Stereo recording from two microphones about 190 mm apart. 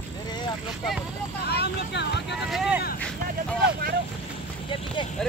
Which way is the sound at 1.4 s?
60° left (ahead or behind).